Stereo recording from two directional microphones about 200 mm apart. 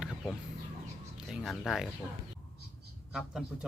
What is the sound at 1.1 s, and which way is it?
Speech, centre (ahead or behind).